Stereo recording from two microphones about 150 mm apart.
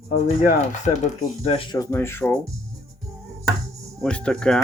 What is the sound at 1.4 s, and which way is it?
Speech, 45° left (ahead or behind).